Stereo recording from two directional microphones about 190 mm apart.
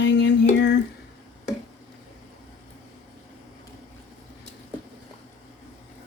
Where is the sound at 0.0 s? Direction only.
65° left (ahead or behind).